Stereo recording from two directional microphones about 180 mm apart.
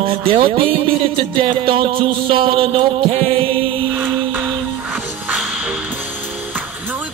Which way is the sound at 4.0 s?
10° right (ahead or behind).